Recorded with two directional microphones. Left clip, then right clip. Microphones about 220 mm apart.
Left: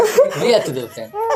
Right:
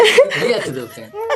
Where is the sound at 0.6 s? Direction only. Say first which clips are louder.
Left 4 dB; 25° right (ahead or behind).